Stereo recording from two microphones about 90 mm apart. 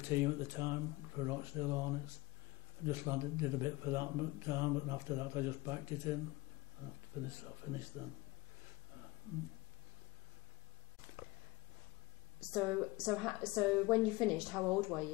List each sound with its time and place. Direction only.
0.0 s speech: 30° right (ahead or behind)
7.2 s speech: 30° right (ahead or behind)
12.4 s a woman's voice: 10° right (ahead or behind)